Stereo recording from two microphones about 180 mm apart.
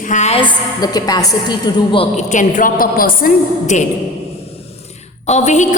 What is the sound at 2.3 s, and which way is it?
A woman's voice, 45° left (ahead or behind).